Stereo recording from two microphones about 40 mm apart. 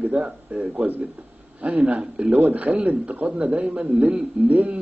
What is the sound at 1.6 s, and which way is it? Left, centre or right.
Speech, right.